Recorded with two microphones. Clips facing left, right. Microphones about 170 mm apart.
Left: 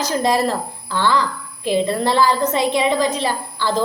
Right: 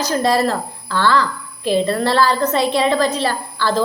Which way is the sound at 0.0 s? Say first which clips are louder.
Right 1 dB; 15° left (ahead or behind).